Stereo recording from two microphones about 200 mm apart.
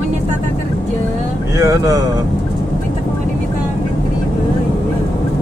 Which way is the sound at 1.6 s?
15° right (ahead or behind).